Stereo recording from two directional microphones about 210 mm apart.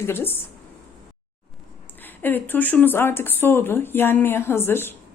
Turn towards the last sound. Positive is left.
turn(degrees=10)  # may be behind; listen again after turning